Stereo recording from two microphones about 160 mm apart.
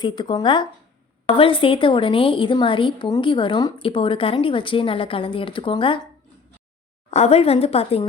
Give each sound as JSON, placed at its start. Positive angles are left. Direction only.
{"t": 0.0, "sound": "a woman's voice", "side_deg": 25}
{"t": 7.1, "sound": "a woman's voice", "side_deg": 40}